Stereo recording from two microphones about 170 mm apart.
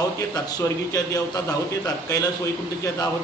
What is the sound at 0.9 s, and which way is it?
Speech, 20° left (ahead or behind).